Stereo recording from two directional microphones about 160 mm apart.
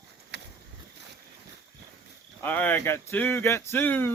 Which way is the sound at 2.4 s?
10° left (ahead or behind).